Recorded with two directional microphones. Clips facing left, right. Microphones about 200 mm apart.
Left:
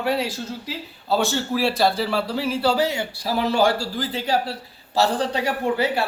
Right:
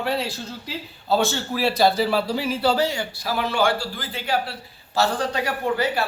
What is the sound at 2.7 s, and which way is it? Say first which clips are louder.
Speech: left 1 dB; 15° left (ahead or behind).